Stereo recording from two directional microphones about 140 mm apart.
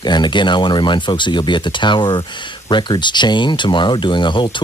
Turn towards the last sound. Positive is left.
turn(degrees=35)  # may be behind; listen again after turning